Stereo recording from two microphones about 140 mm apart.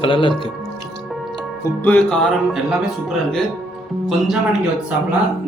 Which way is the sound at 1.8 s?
10° left (ahead or behind).